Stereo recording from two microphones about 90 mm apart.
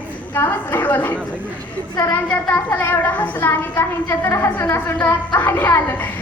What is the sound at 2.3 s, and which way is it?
A woman's voice, 20° left (ahead or behind).